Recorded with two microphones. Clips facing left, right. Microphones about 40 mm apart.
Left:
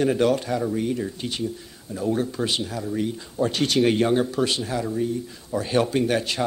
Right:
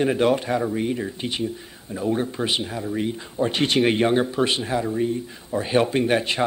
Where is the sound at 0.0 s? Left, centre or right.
Right.